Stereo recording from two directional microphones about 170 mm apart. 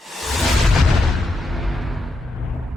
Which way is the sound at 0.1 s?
Centre (ahead or behind).